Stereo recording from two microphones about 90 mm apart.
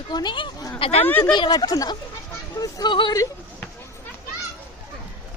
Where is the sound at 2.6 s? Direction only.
55° left (ahead or behind).